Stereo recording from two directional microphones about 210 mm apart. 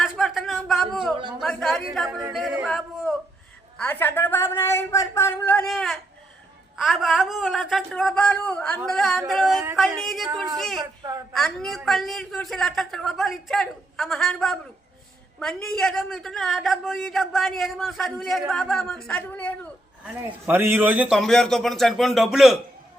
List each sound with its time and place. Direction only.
0.0 s a sound: centre (ahead or behind)
1.4 s a man's voice: centre (ahead or behind)
11.0 s a woman's voice: 15° right (ahead or behind)
11.3 s a man's voice: centre (ahead or behind)
20.5 s a man's voice: 10° right (ahead or behind)